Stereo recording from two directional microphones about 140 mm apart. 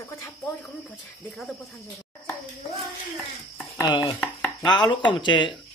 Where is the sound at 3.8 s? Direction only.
30° left (ahead or behind).